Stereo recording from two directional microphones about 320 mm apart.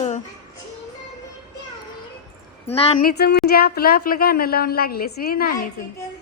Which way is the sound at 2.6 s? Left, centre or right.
Centre.